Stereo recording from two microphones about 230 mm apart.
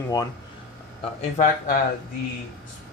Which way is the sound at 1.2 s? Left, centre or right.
Left.